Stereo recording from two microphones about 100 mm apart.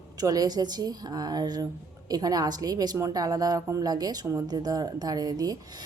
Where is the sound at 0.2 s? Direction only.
40° right (ahead or behind).